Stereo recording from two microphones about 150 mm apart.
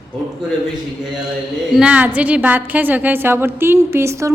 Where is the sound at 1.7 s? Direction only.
10° right (ahead or behind).